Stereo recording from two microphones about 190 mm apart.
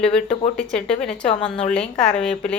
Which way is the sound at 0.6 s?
5° left (ahead or behind).